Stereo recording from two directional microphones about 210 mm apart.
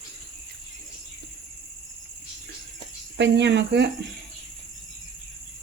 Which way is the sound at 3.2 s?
55° right (ahead or behind).